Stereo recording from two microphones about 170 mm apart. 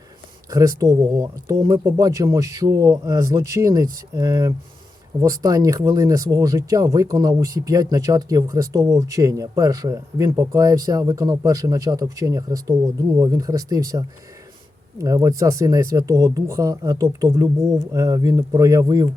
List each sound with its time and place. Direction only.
0.5 s speech: 20° right (ahead or behind)